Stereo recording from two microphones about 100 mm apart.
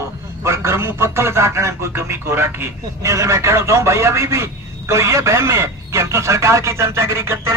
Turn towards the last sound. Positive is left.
turn(degrees=-25)  # may be behind; listen again after turning